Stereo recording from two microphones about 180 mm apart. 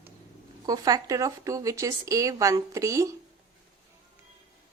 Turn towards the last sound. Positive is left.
turn(degrees=-15)  # may be behind; listen again after turning